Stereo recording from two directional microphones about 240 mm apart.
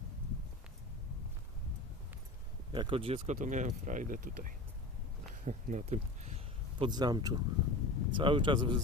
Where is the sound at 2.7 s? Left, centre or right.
Right.